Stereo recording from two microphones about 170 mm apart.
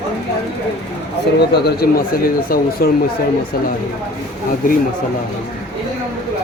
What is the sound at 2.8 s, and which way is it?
Speech, 60° left (ahead or behind).